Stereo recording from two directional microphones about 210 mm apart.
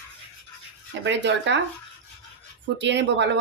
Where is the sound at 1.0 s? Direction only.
60° right (ahead or behind).